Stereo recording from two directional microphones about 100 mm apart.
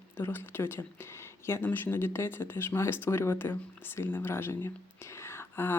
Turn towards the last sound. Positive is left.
turn(degrees=25)  # may be behind; listen again after turning